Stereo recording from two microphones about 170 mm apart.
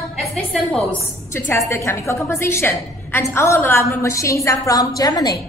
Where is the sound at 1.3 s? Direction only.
15° left (ahead or behind).